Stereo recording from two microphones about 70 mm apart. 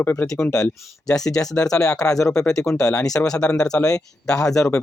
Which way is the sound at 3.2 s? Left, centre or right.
Centre.